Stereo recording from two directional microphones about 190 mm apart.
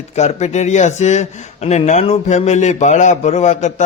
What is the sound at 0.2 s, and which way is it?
Speech, 35° left (ahead or behind).